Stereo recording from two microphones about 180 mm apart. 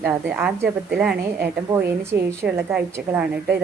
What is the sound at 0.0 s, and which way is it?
A woman's voice, 10° right (ahead or behind).